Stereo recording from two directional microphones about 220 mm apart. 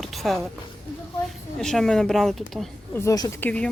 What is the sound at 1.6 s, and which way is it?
Speech, centre (ahead or behind).